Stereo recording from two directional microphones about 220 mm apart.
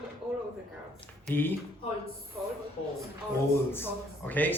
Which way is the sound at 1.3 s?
10° left (ahead or behind).